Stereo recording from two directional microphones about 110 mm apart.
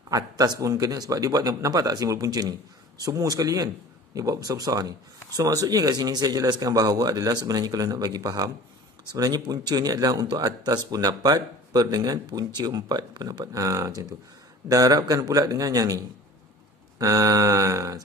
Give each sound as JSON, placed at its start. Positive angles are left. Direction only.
{"t": 0.1, "sound": "a man's voice", "side_deg": -35}